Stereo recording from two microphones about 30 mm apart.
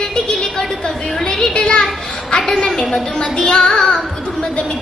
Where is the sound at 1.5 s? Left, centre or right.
Left.